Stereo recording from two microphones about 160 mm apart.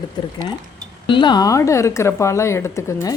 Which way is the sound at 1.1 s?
30° left (ahead or behind).